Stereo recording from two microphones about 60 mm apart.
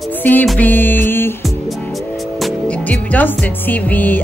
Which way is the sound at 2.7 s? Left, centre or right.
Left.